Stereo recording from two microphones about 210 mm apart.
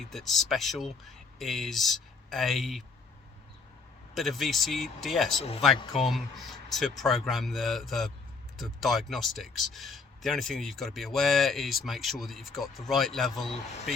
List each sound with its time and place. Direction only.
0.0 s speech: centre (ahead or behind)
4.1 s speech: centre (ahead or behind)
5.8 s speech: 25° left (ahead or behind)
6.1 s speech: centre (ahead or behind)
13.5 s speech: 30° left (ahead or behind)